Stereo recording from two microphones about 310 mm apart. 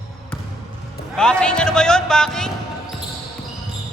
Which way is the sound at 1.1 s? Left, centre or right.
Centre.